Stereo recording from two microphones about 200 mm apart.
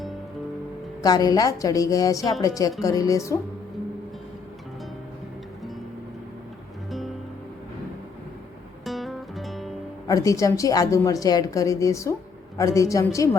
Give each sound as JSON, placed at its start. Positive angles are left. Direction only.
{"t": 1.0, "sound": "a woman's voice", "side_deg": 20}
{"t": 8.8, "sound": "guitar", "side_deg": 0}
{"t": 10.1, "sound": "a woman's voice", "side_deg": 15}